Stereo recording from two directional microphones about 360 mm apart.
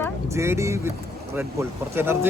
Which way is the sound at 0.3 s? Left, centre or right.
Centre.